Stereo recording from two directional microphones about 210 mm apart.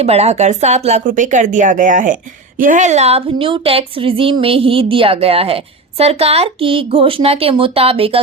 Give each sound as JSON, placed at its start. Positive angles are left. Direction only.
{"t": 0.0, "sound": "a woman's voice", "side_deg": -30}